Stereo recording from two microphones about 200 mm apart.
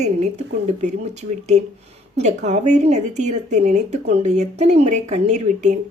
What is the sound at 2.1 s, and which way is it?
Speech, 35° right (ahead or behind).